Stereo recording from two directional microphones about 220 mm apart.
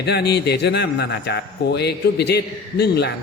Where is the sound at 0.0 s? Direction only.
50° left (ahead or behind).